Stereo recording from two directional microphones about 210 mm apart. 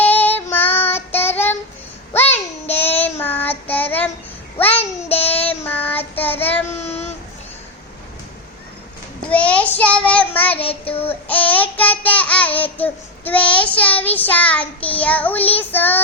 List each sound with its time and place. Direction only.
0.0 s child singing: 10° left (ahead or behind)
2.2 s child singing: 30° left (ahead or behind)
2.7 s child singing: 10° left (ahead or behind)
4.5 s a sound: 10° left (ahead or behind)
5.1 s child singing: 10° left (ahead or behind)
6.7 s child singing: 30° left (ahead or behind)
9.3 s child singing: 5° left (ahead or behind)
10.5 s child singing: 25° left (ahead or behind)
11.3 s babbling: 10° left (ahead or behind)
12.6 s child singing: 10° left (ahead or behind)